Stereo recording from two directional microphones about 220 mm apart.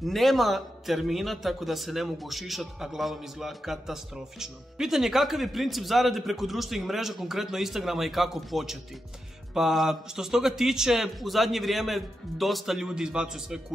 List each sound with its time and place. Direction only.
0.0 s a man's voice: centre (ahead or behind)